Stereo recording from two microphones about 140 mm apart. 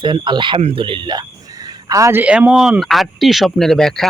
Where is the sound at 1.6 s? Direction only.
25° right (ahead or behind).